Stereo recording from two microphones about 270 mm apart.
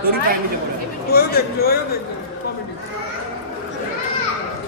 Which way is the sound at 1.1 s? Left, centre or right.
Left.